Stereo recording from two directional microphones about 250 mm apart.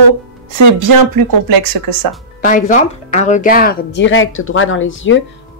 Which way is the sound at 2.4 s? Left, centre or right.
Left.